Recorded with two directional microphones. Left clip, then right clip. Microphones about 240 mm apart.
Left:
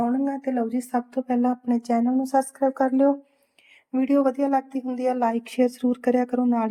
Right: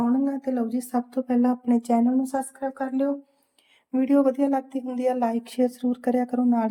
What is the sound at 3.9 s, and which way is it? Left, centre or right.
Speech, centre.